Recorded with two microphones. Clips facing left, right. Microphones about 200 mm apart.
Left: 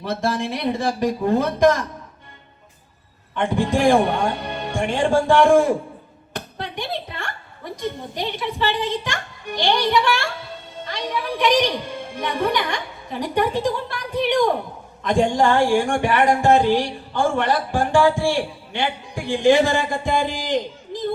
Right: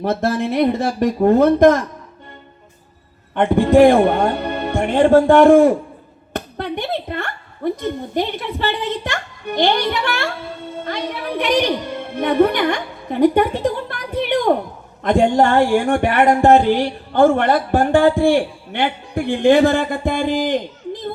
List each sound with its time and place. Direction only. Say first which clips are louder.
0.0 s speech: right 5 dB; 60° right (ahead or behind)
3.3 s a woman's voice: right 9 dB; 60° right (ahead or behind)